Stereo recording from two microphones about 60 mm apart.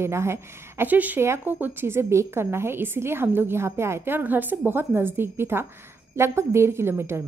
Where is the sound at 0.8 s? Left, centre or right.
Right.